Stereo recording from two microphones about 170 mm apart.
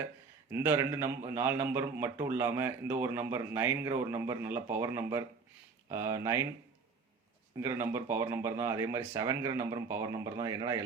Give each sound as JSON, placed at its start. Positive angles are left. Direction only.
{"t": 0.5, "sound": "a man's voice", "side_deg": -15}
{"t": 7.6, "sound": "a man's voice", "side_deg": -15}